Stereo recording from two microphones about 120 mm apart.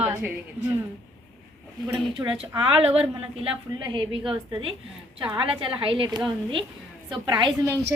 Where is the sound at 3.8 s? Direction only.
40° right (ahead or behind).